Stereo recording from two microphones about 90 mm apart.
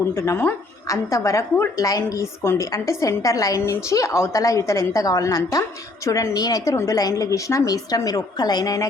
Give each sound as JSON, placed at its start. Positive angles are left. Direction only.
{"t": 0.1, "sound": "a woman's voice", "side_deg": 35}